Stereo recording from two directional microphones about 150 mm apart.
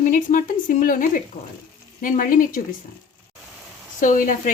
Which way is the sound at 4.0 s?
60° left (ahead or behind).